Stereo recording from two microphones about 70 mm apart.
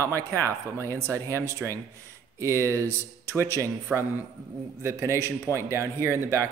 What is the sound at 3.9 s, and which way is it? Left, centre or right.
Speech, centre.